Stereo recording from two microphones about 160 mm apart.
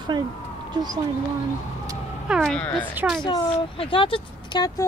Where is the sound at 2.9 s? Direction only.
10° right (ahead or behind).